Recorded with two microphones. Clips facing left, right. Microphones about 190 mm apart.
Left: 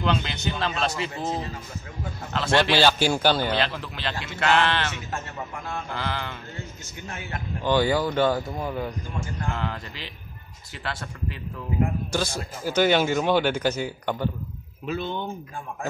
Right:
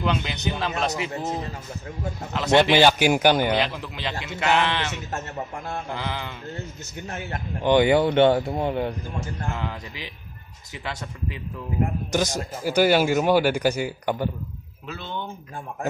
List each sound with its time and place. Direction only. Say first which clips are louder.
0.0 s a man's voice: even; 10° right (ahead or behind)
2.3 s a man's voice: right 4 dB; 15° right (ahead or behind)
7.6 s speech: right 4 dB; 20° right (ahead or behind)
9.6 s a man's voice: even; 15° right (ahead or behind)
14.9 s speech: left 4 dB; 15° left (ahead or behind)